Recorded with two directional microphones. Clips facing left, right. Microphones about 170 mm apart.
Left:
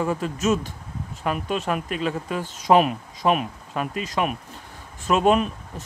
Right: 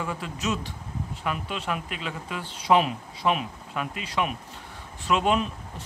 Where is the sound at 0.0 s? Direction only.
40° left (ahead or behind).